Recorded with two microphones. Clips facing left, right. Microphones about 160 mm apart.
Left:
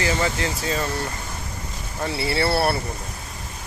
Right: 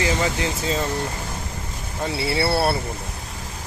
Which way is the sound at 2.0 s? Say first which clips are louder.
Even; 15° right (ahead or behind).